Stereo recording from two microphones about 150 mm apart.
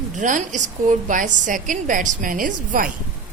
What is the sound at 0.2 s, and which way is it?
A woman's voice, 55° right (ahead or behind).